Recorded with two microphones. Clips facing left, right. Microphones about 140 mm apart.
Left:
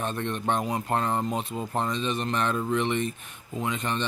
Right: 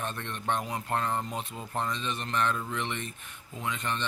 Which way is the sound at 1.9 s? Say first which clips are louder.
Left 6 dB; 20° left (ahead or behind).